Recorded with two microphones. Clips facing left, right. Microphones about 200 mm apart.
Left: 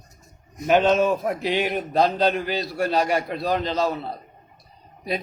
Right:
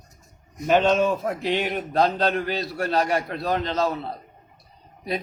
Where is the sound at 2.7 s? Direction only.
15° left (ahead or behind).